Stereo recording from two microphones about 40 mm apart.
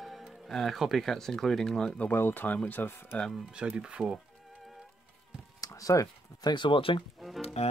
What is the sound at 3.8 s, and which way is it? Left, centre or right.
Speech, right.